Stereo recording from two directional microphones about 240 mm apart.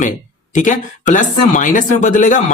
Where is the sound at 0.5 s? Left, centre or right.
Left.